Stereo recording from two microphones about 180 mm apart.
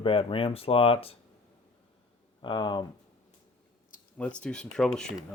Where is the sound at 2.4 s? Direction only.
25° left (ahead or behind).